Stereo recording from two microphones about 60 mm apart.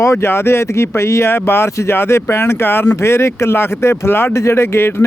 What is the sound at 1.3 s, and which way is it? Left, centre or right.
Speech, left.